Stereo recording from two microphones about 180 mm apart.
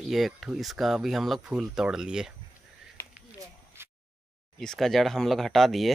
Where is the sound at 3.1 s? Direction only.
10° right (ahead or behind).